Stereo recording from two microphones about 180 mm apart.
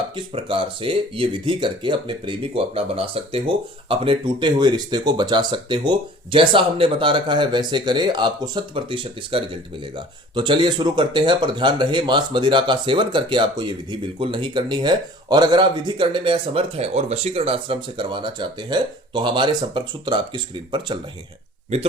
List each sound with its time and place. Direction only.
0.2 s speech: 30° right (ahead or behind)